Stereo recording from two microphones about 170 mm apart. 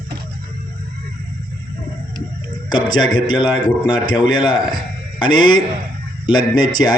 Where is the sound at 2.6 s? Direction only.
25° left (ahead or behind).